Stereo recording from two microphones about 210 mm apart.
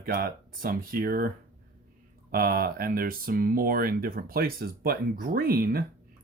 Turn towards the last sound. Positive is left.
turn(degrees=-45)  # may be behind; listen again after turning